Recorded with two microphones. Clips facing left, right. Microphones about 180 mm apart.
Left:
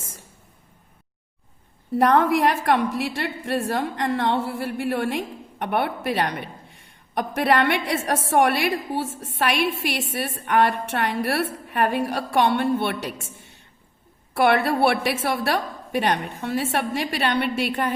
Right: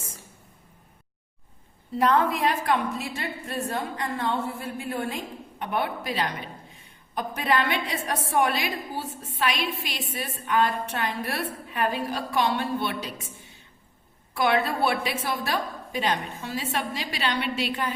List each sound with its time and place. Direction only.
2.0 s a woman's voice: 65° left (ahead or behind)